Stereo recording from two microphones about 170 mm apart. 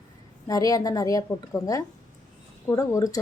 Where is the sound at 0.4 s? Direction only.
20° left (ahead or behind).